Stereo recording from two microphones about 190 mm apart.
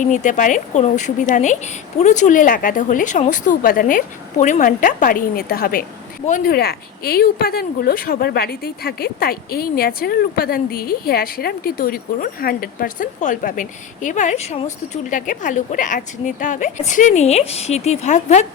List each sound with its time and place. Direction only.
0.0 s a woman's voice: 40° left (ahead or behind)